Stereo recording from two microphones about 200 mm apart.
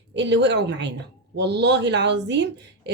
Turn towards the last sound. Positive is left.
turn(degrees=-55)  # may be behind; listen again after turning